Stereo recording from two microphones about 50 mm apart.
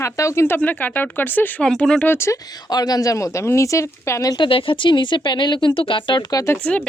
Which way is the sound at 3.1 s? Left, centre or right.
Left.